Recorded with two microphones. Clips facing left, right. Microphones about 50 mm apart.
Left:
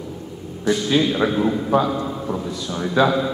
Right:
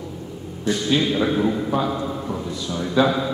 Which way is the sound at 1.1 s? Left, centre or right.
Left.